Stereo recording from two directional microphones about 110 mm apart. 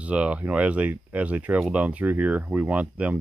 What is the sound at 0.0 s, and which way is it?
Speech, 10° right (ahead or behind).